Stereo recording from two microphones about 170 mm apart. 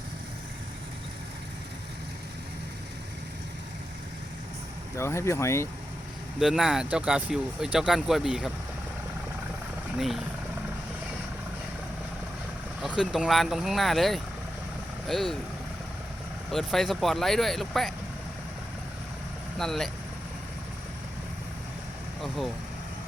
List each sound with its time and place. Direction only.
4.9 s speech: 15° left (ahead or behind)
6.4 s speech: 5° right (ahead or behind)
10.0 s speech: centre (ahead or behind)
12.8 s speech: 5° right (ahead or behind)
16.5 s speech: centre (ahead or behind)
19.5 s speech: centre (ahead or behind)